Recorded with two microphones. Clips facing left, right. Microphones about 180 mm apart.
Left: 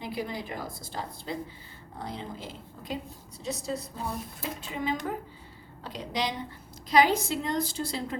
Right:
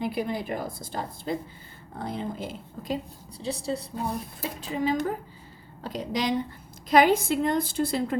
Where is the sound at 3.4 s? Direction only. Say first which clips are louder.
Right 3 dB; 30° right (ahead or behind).